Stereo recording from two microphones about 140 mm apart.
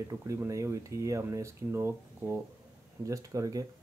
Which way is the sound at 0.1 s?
20° right (ahead or behind).